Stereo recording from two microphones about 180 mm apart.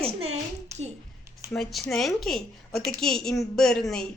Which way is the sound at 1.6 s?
Centre (ahead or behind).